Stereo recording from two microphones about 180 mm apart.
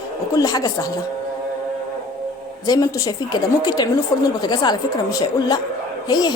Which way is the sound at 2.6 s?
20° left (ahead or behind).